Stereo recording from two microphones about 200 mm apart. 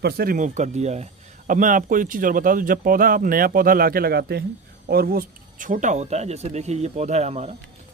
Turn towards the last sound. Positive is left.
turn(degrees=-30)  # may be behind; listen again after turning